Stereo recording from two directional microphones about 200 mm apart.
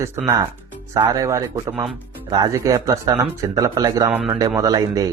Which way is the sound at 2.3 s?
20° right (ahead or behind).